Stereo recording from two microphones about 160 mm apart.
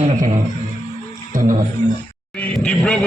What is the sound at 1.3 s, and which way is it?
Music, 55° right (ahead or behind).